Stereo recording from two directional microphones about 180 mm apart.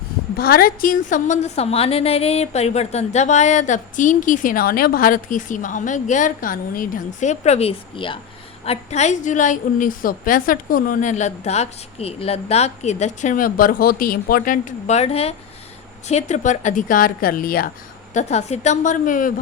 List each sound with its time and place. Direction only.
0.3 s a woman's voice: 55° left (ahead or behind)
18.1 s a woman's voice: 40° left (ahead or behind)